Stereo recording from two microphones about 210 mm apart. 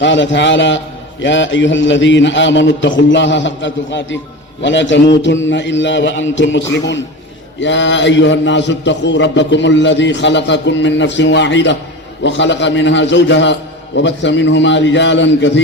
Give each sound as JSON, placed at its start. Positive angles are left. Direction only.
{"t": 0.0, "sound": "a man's voice", "side_deg": 60}